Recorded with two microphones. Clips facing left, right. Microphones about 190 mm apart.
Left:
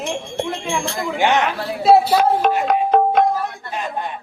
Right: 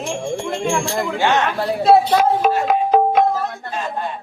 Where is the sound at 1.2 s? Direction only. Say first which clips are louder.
Left 1 dB; 15° left (ahead or behind).